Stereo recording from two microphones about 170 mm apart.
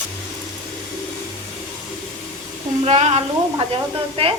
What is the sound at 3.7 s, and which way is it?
Sizzle, 30° right (ahead or behind).